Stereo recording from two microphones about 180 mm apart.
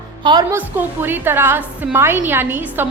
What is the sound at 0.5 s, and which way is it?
A woman's voice, 10° right (ahead or behind).